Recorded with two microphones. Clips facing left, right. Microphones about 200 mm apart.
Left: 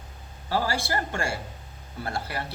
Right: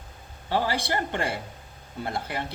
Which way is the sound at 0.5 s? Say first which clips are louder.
Right 1 dB; 20° right (ahead or behind).